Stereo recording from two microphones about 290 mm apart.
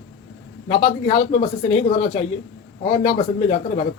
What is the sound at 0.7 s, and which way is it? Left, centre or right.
Speech, centre.